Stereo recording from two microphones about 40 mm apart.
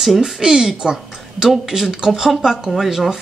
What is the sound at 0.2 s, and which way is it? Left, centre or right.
Speech, centre.